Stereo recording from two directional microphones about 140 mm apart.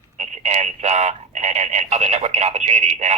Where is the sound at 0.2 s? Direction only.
55° right (ahead or behind).